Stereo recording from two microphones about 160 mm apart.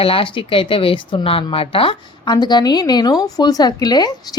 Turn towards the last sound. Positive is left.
turn(degrees=25)  # may be behind; listen again after turning